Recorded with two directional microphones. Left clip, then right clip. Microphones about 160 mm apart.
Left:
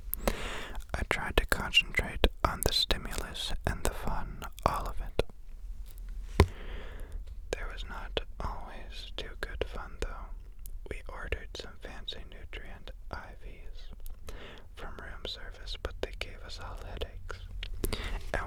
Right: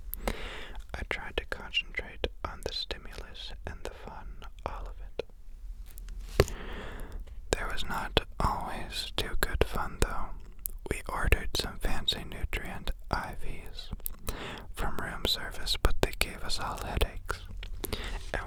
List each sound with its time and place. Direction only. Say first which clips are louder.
0.2 s whispering: left 3 dB; 15° left (ahead or behind); by 5.2 s 45° left (ahead or behind)
6.5 s whispering: right 5 dB; 30° right (ahead or behind); by 17.4 s 55° right (ahead or behind)
17.6 s whispering: left 1 dB; 5° right (ahead or behind)